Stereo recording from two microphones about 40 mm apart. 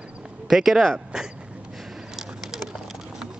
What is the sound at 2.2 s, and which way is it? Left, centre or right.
Bird, centre.